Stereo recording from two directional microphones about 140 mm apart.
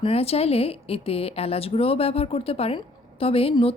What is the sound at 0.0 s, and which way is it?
A woman's voice, 45° left (ahead or behind).